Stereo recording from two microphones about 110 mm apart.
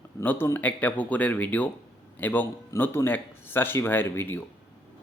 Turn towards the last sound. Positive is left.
turn(degrees=20)  # may be behind; listen again after turning